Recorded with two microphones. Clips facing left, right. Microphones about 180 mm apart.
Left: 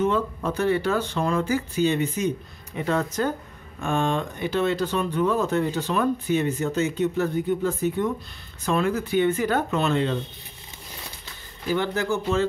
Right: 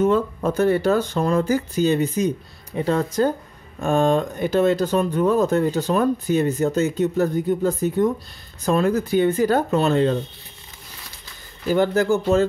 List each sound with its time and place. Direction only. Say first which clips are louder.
0.0 s speech: right 5 dB; 45° right (ahead or behind)
11.7 s speech: right 6 dB; 45° right (ahead or behind)